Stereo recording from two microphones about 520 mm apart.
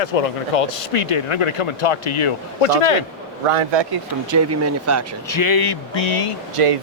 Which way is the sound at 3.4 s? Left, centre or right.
Right.